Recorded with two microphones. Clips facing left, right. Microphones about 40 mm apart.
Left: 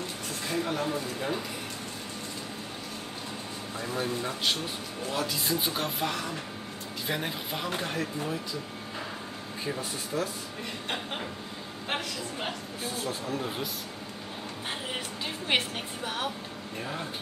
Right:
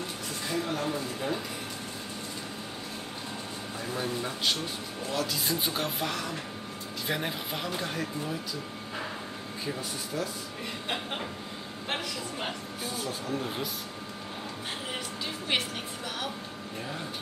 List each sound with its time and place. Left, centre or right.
0.5 s speech: centre
3.8 s speech: centre
9.8 s speech: left
11.9 s speech: centre
12.9 s speech: left
15.5 s a woman's voice: left